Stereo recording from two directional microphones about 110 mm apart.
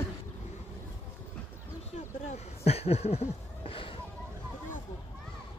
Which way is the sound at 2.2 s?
80° left.